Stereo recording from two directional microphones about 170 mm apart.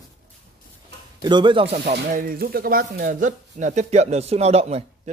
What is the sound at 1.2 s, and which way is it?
Speech, 25° right (ahead or behind).